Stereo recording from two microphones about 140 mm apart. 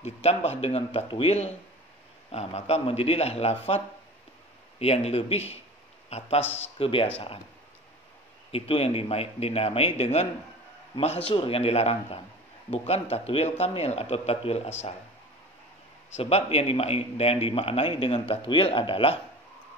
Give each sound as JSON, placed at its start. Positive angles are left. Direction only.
{"t": 0.0, "sound": "a man's voice", "side_deg": 50}
{"t": 8.5, "sound": "a man's voice", "side_deg": 45}
{"t": 11.2, "sound": "a man's voice", "side_deg": 40}
{"t": 16.1, "sound": "a man's voice", "side_deg": 50}